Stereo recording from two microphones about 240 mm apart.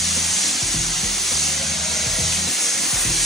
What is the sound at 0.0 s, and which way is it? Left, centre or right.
Music, centre.